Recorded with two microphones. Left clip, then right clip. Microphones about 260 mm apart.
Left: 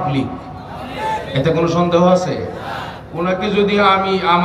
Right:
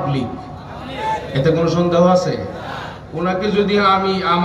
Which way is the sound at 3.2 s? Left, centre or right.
Centre.